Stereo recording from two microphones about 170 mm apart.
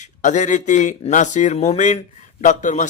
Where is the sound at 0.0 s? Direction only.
45° left (ahead or behind).